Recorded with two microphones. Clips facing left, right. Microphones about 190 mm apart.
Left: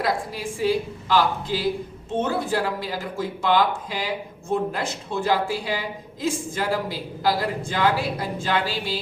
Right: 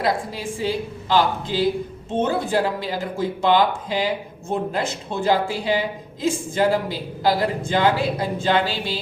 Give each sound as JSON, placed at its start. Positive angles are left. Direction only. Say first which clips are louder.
{"t": 0.0, "sound": "speech", "louder": "right 2 dB", "side_deg": -25}